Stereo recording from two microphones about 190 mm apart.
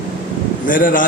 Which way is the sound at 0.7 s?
45° left (ahead or behind).